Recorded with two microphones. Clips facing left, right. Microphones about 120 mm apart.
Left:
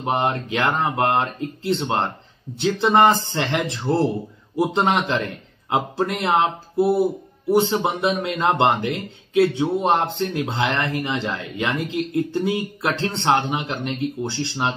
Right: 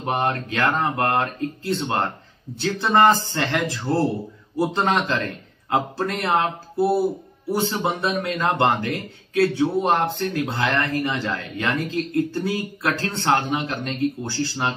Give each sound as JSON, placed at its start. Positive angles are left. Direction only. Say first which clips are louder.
{"t": 0.0, "sound": "a man's voice", "louder": "left 1 dB", "side_deg": 20}